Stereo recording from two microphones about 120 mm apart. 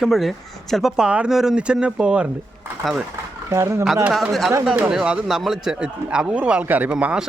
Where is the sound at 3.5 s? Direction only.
25° right (ahead or behind).